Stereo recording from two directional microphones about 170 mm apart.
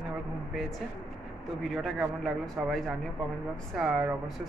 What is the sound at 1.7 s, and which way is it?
A woman's voice, centre (ahead or behind).